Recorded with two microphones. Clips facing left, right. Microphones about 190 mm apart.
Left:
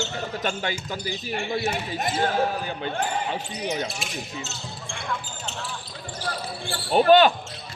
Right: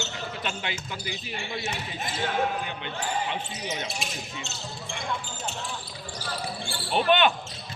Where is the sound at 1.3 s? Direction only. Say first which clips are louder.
Left 8 dB; 55° left (ahead or behind).